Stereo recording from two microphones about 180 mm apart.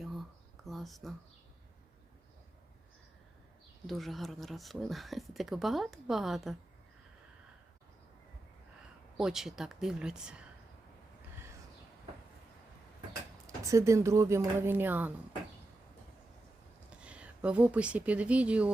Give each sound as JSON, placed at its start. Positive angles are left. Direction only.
{"t": 0.0, "sound": "a sound", "side_deg": 0}
{"t": 3.8, "sound": "speech", "side_deg": 0}
{"t": 9.1, "sound": "speech", "side_deg": 0}
{"t": 13.7, "sound": "speech", "side_deg": -15}
{"t": 16.9, "sound": "speech", "side_deg": -5}